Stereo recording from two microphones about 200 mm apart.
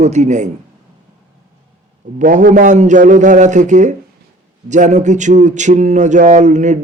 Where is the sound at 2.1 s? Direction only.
40° right (ahead or behind).